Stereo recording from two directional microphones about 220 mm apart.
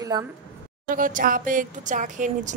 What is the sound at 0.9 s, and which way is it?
Speech, 40° right (ahead or behind).